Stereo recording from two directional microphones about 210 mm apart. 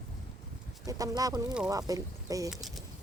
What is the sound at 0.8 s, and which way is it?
Speech, 15° right (ahead or behind).